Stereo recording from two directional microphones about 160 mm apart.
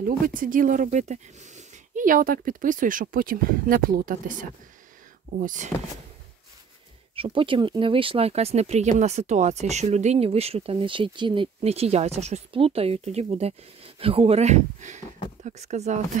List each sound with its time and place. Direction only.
0.0 s speech: 60° right (ahead or behind)
7.2 s speech: 35° right (ahead or behind)